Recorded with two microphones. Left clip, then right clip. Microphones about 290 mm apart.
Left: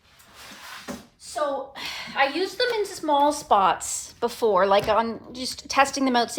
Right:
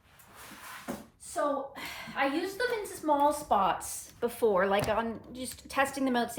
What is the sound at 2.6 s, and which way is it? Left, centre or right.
A woman's voice, left.